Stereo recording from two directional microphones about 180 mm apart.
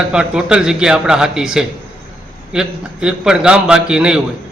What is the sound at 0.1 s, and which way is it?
A man's voice, 5° right (ahead or behind).